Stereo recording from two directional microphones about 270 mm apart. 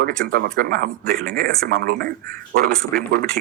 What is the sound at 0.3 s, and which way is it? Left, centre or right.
Speech, right.